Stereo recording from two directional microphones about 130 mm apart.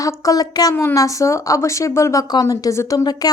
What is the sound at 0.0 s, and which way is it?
A woman's voice, 30° left (ahead or behind).